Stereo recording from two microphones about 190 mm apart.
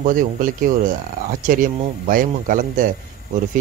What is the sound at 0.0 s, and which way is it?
Speech, 45° right (ahead or behind).